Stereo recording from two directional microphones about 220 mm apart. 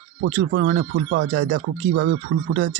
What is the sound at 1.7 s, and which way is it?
Speech, 45° right (ahead or behind).